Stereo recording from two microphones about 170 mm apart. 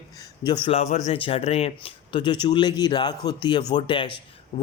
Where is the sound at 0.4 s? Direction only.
35° left (ahead or behind).